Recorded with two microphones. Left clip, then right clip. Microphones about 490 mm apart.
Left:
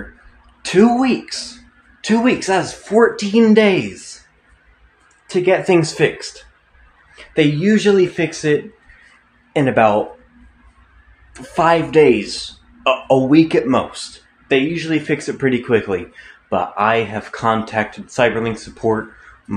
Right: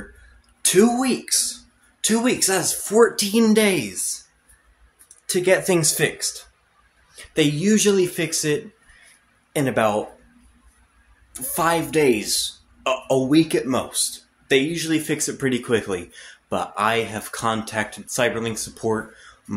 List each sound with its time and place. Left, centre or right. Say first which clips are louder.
0.6 s speech: left 4 dB; right
5.3 s speech: left 4 dB; right
11.5 s speech: left 7 dB; right